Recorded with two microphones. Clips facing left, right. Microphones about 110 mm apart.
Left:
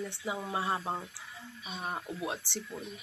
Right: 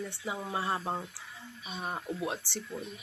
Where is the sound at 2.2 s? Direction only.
15° left (ahead or behind).